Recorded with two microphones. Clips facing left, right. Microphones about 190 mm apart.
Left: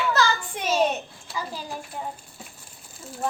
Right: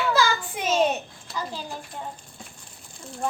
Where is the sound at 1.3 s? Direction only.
10° left (ahead or behind).